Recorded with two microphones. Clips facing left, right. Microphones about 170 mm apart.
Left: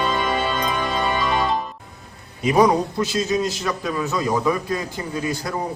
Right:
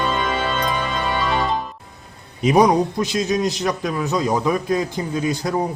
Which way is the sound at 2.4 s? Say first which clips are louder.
Right 2 dB; 20° right (ahead or behind).